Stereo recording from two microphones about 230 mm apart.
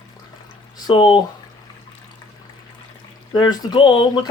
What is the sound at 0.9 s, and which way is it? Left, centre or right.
Speech, left.